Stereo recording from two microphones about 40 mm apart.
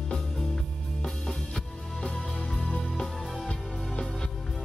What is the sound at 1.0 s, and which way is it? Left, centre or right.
Music, centre.